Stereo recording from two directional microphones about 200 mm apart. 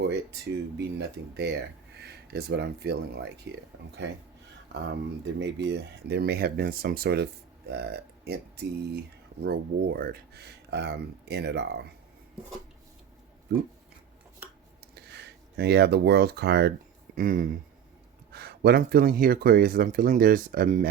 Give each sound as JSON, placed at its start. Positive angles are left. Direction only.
{"t": 0.0, "sound": "speech", "side_deg": -55}
{"t": 5.2, "sound": "speech", "side_deg": -60}
{"t": 14.9, "sound": "speech", "side_deg": -55}